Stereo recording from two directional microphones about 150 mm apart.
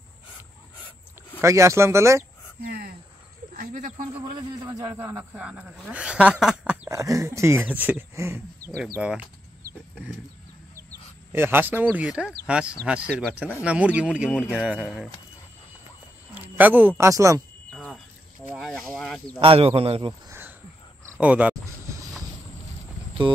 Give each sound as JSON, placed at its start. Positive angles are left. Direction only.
{"t": 1.4, "sound": "speech", "side_deg": -20}
{"t": 2.6, "sound": "cricket", "side_deg": -75}
{"t": 3.5, "sound": "speech", "side_deg": -60}
{"t": 4.7, "sound": "speech", "side_deg": -20}
{"t": 6.9, "sound": "speech", "side_deg": -20}
{"t": 8.7, "sound": "speech", "side_deg": -5}
{"t": 11.3, "sound": "speech", "side_deg": -15}
{"t": 16.3, "sound": "speech", "side_deg": -10}
{"t": 17.7, "sound": "pour", "side_deg": 5}
{"t": 18.5, "sound": "speech", "side_deg": 0}
{"t": 19.4, "sound": "speech", "side_deg": -40}
{"t": 20.2, "sound": "a sound", "side_deg": -15}
{"t": 21.2, "sound": "speech", "side_deg": -10}